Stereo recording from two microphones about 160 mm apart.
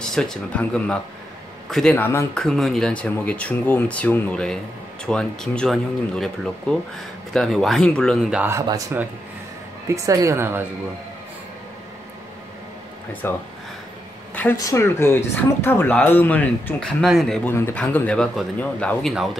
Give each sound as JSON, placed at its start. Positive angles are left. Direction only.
{"t": 0.0, "sound": "speech", "side_deg": 5}
{"t": 2.4, "sound": "speech", "side_deg": 0}
{"t": 8.5, "sound": "a woman's voice", "side_deg": -20}
{"t": 13.2, "sound": "speech", "side_deg": 15}
{"t": 14.3, "sound": "a sound", "side_deg": 10}
{"t": 14.6, "sound": "speech", "side_deg": 15}
{"t": 17.5, "sound": "speech", "side_deg": 15}